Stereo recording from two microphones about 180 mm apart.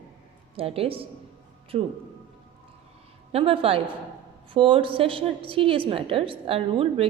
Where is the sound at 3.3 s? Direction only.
30° right (ahead or behind).